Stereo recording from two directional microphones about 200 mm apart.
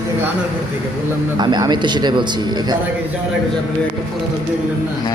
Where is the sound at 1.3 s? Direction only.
20° right (ahead or behind).